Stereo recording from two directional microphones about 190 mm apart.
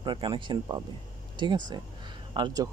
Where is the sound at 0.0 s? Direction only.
25° right (ahead or behind).